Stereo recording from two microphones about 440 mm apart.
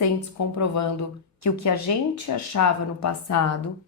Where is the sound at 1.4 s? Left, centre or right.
Left.